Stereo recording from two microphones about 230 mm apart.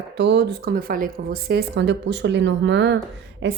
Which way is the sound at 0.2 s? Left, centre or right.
Right.